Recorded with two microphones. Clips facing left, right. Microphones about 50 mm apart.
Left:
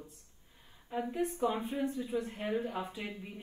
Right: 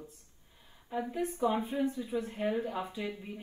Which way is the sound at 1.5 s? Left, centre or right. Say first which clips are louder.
Right 3 dB; right.